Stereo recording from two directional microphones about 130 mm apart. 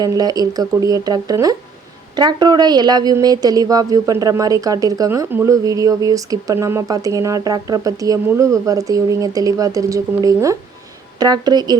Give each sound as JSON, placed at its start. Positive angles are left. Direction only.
{"t": 0.0, "sound": "a woman's voice", "side_deg": -30}